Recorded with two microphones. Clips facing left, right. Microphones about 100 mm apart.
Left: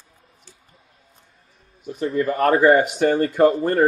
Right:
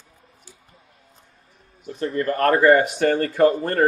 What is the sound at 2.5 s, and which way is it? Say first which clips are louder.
Speech: even; 25° left (ahead or behind).